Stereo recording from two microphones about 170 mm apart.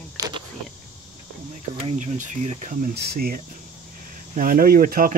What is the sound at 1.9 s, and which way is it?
Speech, 45° right (ahead or behind).